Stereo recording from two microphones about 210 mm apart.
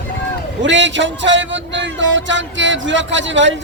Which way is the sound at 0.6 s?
60° right (ahead or behind).